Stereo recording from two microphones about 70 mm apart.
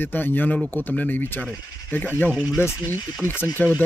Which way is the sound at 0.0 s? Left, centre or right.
Left.